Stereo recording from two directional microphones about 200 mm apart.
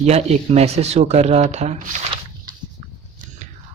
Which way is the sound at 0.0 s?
35° right (ahead or behind).